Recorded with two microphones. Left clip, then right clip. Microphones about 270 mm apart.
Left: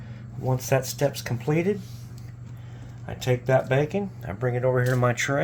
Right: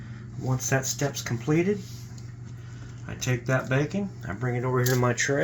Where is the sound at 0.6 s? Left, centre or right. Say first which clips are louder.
Left 3 dB; left.